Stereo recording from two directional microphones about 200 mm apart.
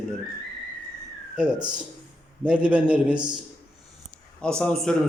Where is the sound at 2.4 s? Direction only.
5° right (ahead or behind).